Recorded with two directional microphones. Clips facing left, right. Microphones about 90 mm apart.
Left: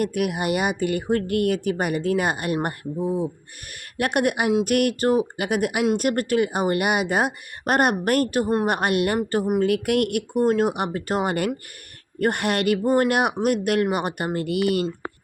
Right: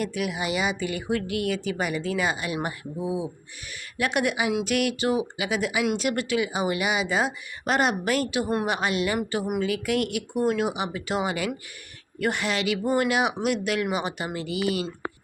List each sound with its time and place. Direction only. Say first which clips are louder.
0.0 s speech: left 5 dB; 55° left (ahead or behind)
10.4 s speech: left 4 dB; 35° left (ahead or behind)
10.7 s speech: left 4 dB; 55° left (ahead or behind)